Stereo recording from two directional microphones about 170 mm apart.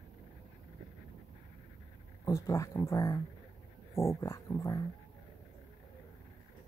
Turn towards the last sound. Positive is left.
turn(degrees=15)  # may be behind; listen again after turning